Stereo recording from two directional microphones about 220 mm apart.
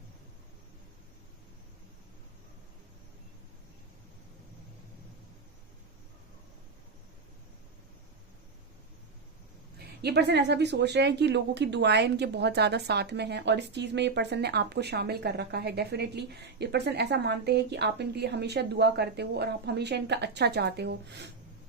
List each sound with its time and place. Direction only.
9.7 s speech: 50° right (ahead or behind)